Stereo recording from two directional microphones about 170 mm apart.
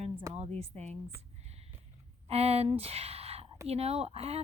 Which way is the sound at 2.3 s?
35° right (ahead or behind).